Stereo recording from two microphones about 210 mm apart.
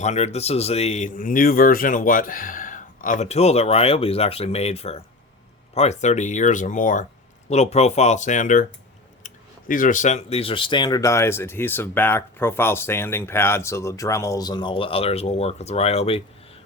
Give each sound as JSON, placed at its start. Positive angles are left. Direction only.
{"t": 0.0, "sound": "a man's voice", "side_deg": 30}